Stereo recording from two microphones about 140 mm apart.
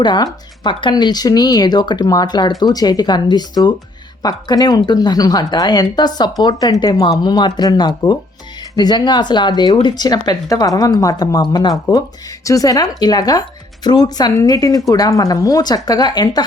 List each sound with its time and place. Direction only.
0.0 s speech: 30° left (ahead or behind)